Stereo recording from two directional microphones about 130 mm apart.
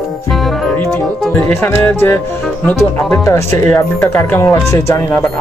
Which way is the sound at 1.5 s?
15° left (ahead or behind).